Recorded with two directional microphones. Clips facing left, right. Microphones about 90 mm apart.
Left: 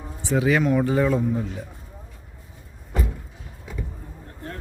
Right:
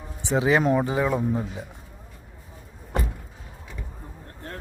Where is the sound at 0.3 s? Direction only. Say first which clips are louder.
Even; 25° right (ahead or behind).